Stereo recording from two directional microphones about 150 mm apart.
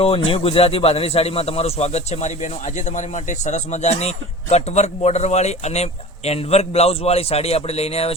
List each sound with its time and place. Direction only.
0.0 s speech: 40° left (ahead or behind)